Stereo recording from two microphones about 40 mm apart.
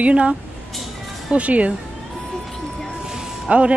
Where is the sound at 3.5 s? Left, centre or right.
Right.